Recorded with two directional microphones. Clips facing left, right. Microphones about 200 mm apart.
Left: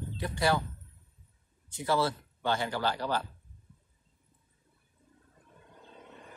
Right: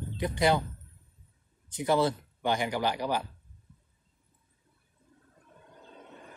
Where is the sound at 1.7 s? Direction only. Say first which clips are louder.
Right 3 dB; 20° right (ahead or behind).